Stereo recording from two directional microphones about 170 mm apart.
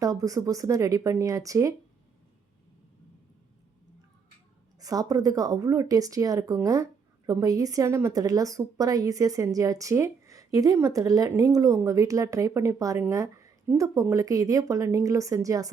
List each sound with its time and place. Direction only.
0.0 s a woman's voice: 20° right (ahead or behind)
4.8 s a woman's voice: 20° right (ahead or behind)